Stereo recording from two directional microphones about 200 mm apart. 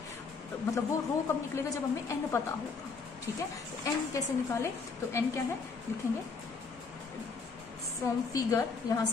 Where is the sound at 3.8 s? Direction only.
15° left (ahead or behind).